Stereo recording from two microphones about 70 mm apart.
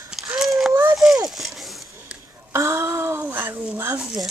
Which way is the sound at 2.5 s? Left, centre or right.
Right.